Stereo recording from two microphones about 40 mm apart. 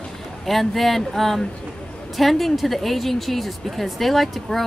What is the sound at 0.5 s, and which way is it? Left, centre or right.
Speech, centre.